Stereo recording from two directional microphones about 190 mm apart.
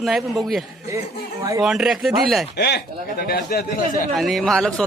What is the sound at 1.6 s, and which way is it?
Speech, centre (ahead or behind).